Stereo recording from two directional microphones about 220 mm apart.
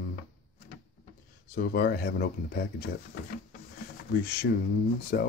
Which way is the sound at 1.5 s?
45° left (ahead or behind).